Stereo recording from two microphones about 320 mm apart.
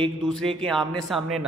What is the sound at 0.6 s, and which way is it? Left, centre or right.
Speech, centre.